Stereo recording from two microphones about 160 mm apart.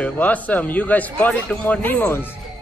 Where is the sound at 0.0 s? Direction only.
10° left (ahead or behind).